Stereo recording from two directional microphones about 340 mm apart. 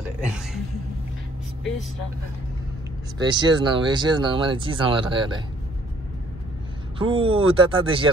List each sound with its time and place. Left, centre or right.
0.2 s a sound: centre
3.2 s speech: centre
7.0 s speech: centre